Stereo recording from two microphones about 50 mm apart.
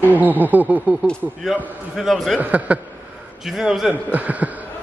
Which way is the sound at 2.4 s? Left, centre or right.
Right.